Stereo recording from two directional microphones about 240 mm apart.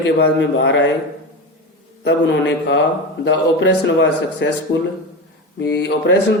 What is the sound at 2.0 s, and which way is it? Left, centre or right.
A man's voice, left.